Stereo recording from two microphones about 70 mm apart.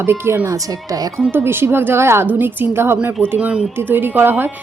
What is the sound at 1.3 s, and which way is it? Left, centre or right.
A woman's voice, right.